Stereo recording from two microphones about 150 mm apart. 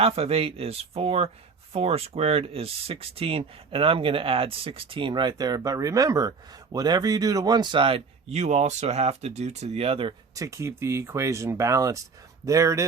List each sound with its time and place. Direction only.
0.0 s speech: 40° right (ahead or behind)
10.3 s speech: 20° right (ahead or behind)